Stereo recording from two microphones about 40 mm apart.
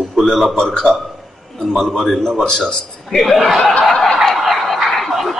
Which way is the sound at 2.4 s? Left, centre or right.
Centre.